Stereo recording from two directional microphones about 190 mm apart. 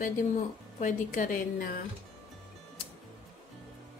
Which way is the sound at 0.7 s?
45° left (ahead or behind).